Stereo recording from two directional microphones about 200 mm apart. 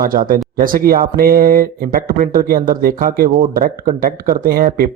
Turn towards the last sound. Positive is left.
turn(degrees=-45)  # may be behind; listen again after turning